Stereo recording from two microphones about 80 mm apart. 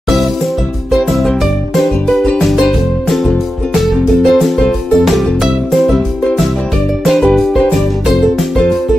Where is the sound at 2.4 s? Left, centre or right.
Centre.